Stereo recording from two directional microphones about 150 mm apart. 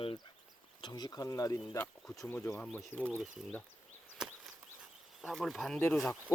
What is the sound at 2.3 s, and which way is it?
Speech, 15° left (ahead or behind).